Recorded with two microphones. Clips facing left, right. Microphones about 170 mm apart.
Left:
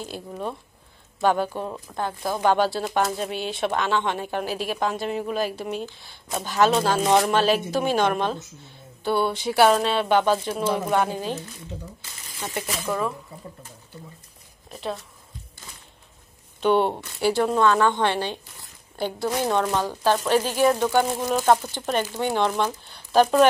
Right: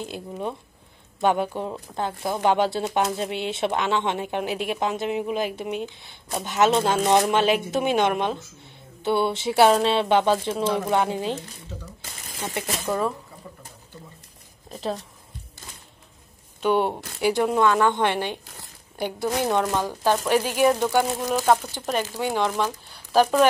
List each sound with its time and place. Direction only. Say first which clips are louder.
0.0 s speech: right 1 dB; 20° right (ahead or behind)
10.6 s speech: even; 10° left (ahead or behind)
10.9 s speech: even; 20° right (ahead or behind)
12.4 s speech: right 1 dB; 25° right (ahead or behind)
14.7 s speech: right 2 dB; 35° right (ahead or behind)
16.6 s speech: left 2 dB; 5° right (ahead or behind)
17.2 s speech: even; 15° right (ahead or behind)